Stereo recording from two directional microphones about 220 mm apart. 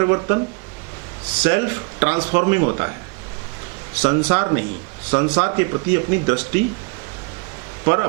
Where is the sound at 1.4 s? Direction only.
15° right (ahead or behind).